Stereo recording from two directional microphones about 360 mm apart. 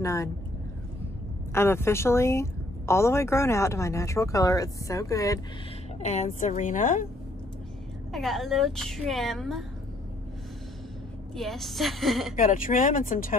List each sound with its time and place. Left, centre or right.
0.0 s speech: centre
1.5 s a woman's voice: centre
8.1 s a woman's voice: centre
11.3 s a woman's voice: centre
12.4 s a woman's voice: left